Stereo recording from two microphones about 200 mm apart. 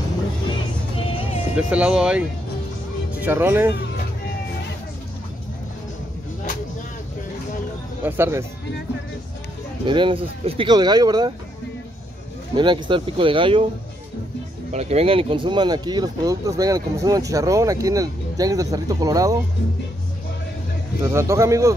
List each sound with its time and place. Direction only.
0.9 s music: 30° left (ahead or behind)
1.5 s speech: 5° right (ahead or behind)
8.0 s speech: 10° right (ahead or behind)
9.8 s speech: 25° right (ahead or behind)
12.5 s speech: 25° right (ahead or behind)
14.7 s speech: 30° right (ahead or behind); by 19.3 s 15° right (ahead or behind)
21.0 s speech: 15° right (ahead or behind)